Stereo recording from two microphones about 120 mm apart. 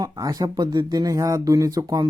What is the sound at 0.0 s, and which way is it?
Speech, 30° right (ahead or behind).